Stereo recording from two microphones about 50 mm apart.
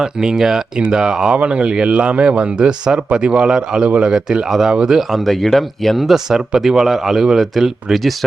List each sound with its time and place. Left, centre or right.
0.0 s speech: centre
3.8 s speech: right
4.1 s speech: centre
5.1 s speech: centre